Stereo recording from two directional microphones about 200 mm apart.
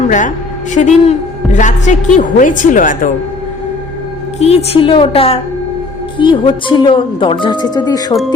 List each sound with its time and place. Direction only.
0.1 s a woman's voice: 40° left (ahead or behind)
4.4 s speech: 30° left (ahead or behind)